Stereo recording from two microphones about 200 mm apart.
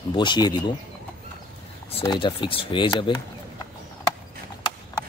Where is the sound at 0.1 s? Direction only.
25° left (ahead or behind).